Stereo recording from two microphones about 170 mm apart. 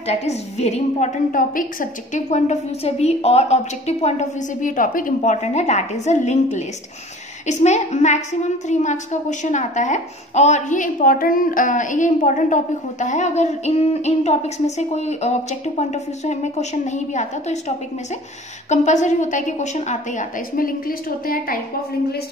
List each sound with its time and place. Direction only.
0.0 s a woman's voice: 40° left (ahead or behind); by 21.5 s 60° left (ahead or behind)